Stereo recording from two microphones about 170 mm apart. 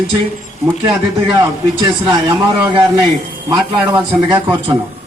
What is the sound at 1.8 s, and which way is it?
Speech, 20° right (ahead or behind).